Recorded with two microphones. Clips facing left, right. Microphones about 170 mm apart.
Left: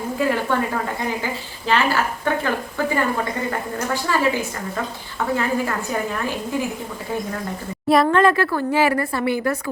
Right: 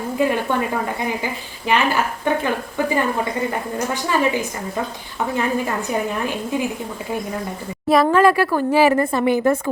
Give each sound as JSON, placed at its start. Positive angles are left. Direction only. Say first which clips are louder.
{"t": 0.2, "sound": "a sound", "louder": "right 1 dB", "side_deg": -20}
{"t": 1.2, "sound": "speech", "louder": "right 1 dB", "side_deg": -15}
{"t": 4.0, "sound": "a woman's voice", "louder": "right 1 dB", "side_deg": -15}
{"t": 7.9, "sound": "speech", "louder": "right 1 dB", "side_deg": -5}